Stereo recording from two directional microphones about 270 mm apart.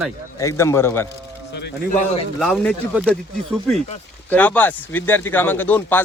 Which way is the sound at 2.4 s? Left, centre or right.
Centre.